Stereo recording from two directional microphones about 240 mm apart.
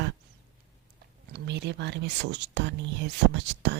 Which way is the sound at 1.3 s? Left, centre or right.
Right.